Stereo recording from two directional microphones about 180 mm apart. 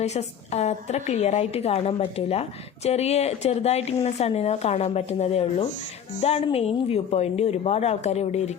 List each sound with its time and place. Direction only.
0.0 s a woman's voice: 35° left (ahead or behind)